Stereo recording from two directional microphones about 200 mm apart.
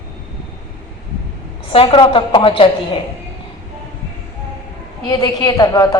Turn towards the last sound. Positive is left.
turn(degrees=20)  # may be behind; listen again after turning